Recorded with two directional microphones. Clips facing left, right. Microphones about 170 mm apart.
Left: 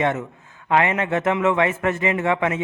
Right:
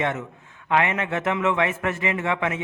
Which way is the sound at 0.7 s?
35° left (ahead or behind).